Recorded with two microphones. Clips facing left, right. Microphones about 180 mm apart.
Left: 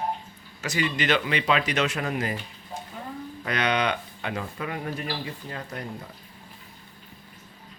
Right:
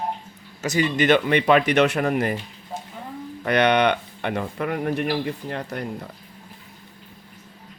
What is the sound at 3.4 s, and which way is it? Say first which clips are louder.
Speech: right 7 dB; 65° right (ahead or behind).